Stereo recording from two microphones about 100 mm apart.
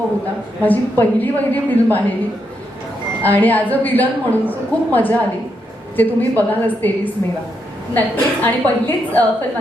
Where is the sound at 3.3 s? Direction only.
15° left (ahead or behind).